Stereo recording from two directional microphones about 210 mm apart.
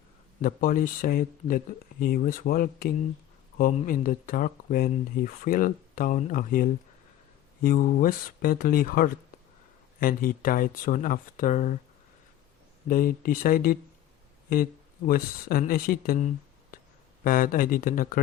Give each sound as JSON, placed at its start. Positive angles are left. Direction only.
{"t": 0.4, "sound": "speech", "side_deg": 40}
{"t": 12.9, "sound": "speech", "side_deg": 45}